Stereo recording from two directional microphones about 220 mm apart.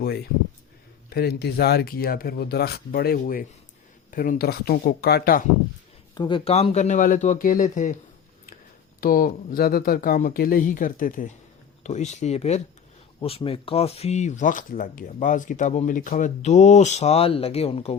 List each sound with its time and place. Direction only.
1.1 s speech: 45° left (ahead or behind)
6.1 s speech: 20° left (ahead or behind); by 7.9 s 35° left (ahead or behind)
9.0 s speech: 40° left (ahead or behind)